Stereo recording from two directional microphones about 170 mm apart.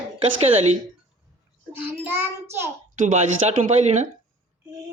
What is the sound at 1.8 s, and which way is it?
Child singing, 10° right (ahead or behind).